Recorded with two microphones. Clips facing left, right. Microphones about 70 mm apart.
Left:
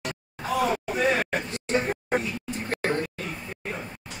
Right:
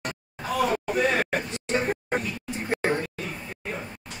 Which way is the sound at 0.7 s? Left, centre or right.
Centre.